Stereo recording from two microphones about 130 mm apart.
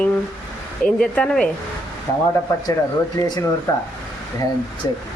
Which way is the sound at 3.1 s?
35° left (ahead or behind).